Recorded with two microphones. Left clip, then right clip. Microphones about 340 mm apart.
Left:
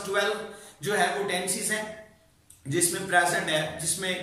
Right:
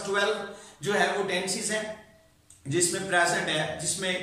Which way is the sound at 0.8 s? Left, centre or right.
Centre.